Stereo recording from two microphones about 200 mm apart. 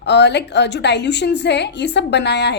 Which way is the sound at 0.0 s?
60° left (ahead or behind).